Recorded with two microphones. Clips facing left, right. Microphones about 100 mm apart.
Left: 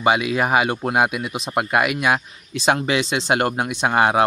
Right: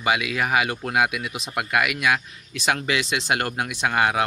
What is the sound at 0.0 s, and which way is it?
Speech, 30° left (ahead or behind).